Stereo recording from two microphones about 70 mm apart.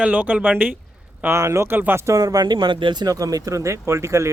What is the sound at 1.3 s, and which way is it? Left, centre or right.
Speech, right.